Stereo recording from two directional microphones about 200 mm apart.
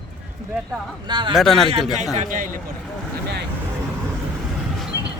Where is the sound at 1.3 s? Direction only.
Centre (ahead or behind).